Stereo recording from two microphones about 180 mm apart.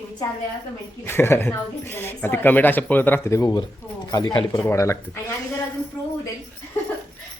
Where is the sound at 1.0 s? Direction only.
15° left (ahead or behind).